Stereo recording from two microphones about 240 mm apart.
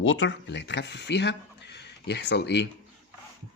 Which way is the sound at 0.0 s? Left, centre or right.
Left.